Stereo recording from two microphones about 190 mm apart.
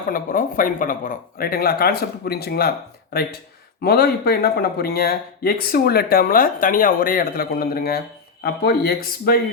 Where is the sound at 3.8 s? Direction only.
55° left (ahead or behind).